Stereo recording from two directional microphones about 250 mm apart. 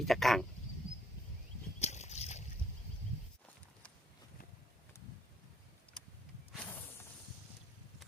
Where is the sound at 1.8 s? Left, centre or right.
Left.